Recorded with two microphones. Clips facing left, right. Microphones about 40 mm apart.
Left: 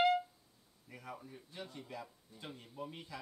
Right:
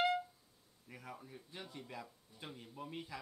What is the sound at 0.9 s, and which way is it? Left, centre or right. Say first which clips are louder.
Speech: left 2 dB; centre.